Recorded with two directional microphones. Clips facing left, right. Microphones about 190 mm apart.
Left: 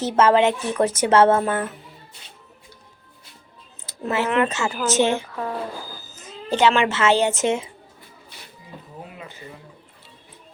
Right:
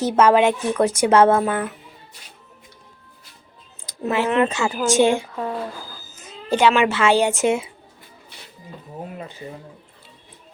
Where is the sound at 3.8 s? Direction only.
15° right (ahead or behind).